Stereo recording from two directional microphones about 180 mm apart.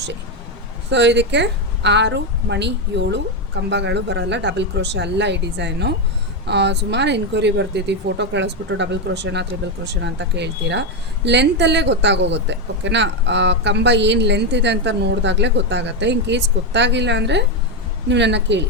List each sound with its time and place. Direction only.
0.9 s speech: 75° right (ahead or behind)